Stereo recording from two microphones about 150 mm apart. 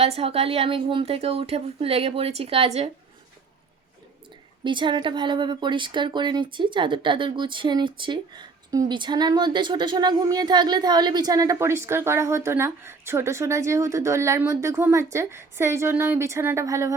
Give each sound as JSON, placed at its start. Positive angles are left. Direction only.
{"t": 0.0, "sound": "a woman's voice", "side_deg": -40}
{"t": 4.6, "sound": "speech", "side_deg": -30}